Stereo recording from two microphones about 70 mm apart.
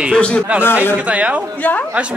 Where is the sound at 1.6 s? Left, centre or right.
Left.